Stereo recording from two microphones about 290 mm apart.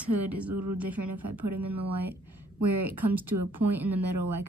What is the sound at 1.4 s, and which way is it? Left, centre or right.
Speech, right.